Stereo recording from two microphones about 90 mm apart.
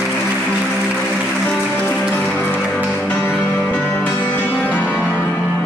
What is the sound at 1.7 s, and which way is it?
Music, 15° left (ahead or behind).